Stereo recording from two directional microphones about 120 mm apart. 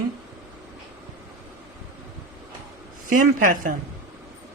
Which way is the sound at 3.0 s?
90° right.